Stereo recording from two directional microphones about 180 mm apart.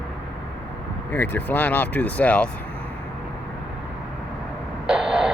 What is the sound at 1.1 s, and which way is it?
Speech, 10° left (ahead or behind).